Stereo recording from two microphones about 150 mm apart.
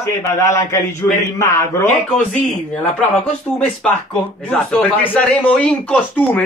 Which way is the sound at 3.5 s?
5° left (ahead or behind).